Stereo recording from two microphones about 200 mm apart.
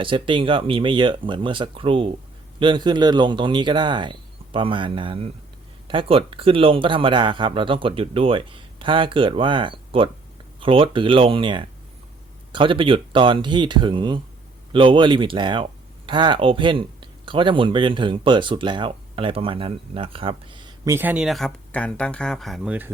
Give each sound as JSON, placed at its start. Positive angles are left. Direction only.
{"t": 0.0, "sound": "a man's voice", "side_deg": -25}
{"t": 20.9, "sound": "speech", "side_deg": -10}